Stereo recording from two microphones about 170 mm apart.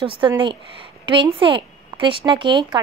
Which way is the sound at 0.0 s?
30° right (ahead or behind).